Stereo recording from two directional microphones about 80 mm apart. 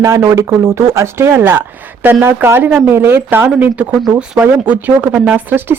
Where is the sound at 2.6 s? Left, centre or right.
Centre.